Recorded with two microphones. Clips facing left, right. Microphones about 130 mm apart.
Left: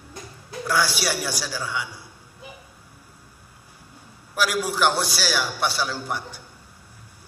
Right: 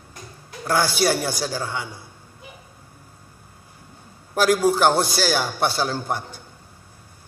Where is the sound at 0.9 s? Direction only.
50° right (ahead or behind).